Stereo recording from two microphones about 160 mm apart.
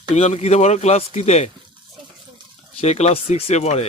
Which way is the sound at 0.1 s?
45° left (ahead or behind).